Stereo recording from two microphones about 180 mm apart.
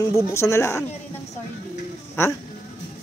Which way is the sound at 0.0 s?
15° left (ahead or behind).